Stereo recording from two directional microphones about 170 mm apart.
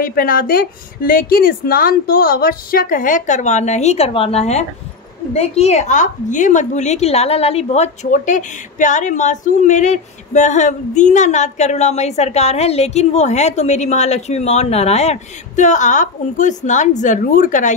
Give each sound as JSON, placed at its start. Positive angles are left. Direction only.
{"t": 0.0, "sound": "a woman's voice", "side_deg": 55}